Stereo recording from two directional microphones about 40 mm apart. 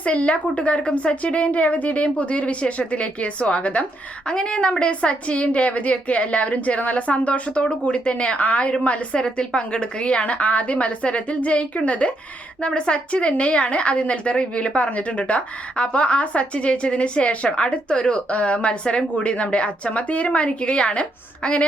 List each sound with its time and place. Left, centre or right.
0.0 s a woman's voice: left
4.3 s a woman's voice: left